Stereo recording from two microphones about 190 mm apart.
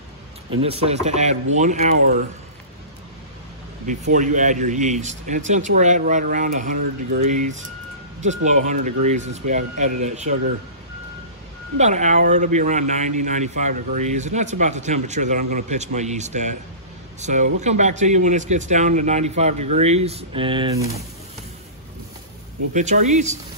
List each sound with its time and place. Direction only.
0.6 s a man's voice: 30° right (ahead or behind)
3.8 s a man's voice: 40° right (ahead or behind)
11.8 s a man's voice: 40° right (ahead or behind); by 20.9 s 20° right (ahead or behind)
22.8 s a man's voice: 40° right (ahead or behind)